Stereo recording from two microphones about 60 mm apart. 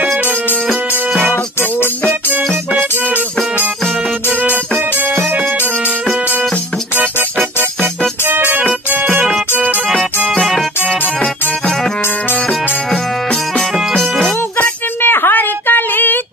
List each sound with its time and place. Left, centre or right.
4.3 s music: right
8.3 s music: right
10.9 s music: centre
14.6 s a sound: left